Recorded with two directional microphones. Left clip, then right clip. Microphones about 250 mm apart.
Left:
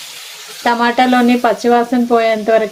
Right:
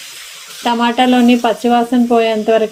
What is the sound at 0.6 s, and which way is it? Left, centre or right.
Speech, right.